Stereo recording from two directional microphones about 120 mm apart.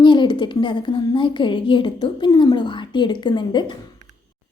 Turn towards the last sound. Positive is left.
turn(degrees=40)  # may be behind; listen again after turning